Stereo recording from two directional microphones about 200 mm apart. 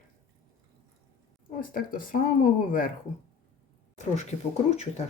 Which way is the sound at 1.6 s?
45° left (ahead or behind).